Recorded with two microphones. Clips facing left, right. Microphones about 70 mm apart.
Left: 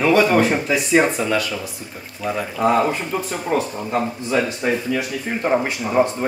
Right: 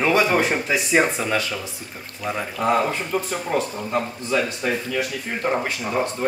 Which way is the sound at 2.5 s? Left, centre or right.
Left.